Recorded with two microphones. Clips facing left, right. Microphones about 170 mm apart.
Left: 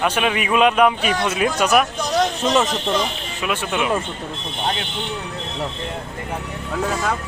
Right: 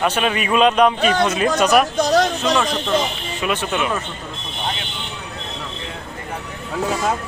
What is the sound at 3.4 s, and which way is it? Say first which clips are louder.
Speech: right 1 dB; 10° left (ahead or behind).